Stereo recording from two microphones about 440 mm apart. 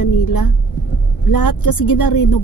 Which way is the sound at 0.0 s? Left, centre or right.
Left.